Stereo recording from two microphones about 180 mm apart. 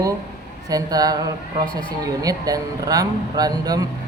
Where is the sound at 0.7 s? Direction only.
20° right (ahead or behind).